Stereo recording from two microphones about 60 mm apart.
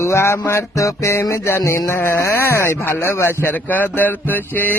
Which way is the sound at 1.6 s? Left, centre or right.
Left.